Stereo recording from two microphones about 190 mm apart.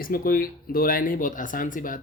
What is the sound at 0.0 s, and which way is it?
Speech, 50° left (ahead or behind).